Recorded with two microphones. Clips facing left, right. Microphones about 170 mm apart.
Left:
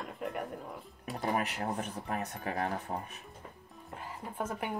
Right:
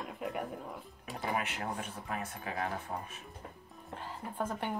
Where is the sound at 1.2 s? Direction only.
40° left (ahead or behind).